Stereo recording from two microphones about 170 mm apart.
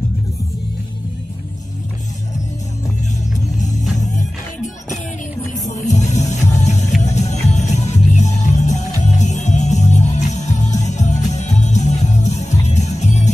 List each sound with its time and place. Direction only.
3.3 s music: 45° left (ahead or behind)
5.7 s music: 45° left (ahead or behind)